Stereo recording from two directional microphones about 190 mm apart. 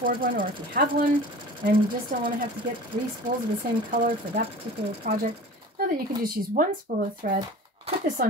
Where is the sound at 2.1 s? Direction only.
45° right (ahead or behind).